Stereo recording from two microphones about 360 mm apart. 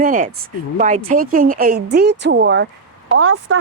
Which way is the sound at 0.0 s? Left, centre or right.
Right.